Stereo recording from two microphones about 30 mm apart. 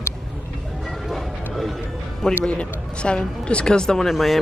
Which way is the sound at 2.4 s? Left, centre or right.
Left.